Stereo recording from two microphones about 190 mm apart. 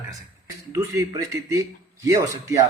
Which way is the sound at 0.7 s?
15° right (ahead or behind).